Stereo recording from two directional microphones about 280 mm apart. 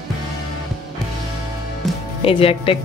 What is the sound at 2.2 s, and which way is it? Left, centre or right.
Speech, centre.